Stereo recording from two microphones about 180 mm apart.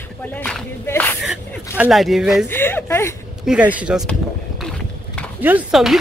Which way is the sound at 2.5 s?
10° left (ahead or behind).